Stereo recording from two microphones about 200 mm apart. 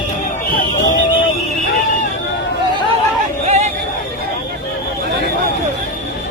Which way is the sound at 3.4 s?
35° right (ahead or behind).